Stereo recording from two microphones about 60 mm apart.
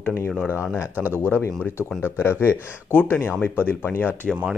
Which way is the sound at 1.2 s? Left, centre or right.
Left.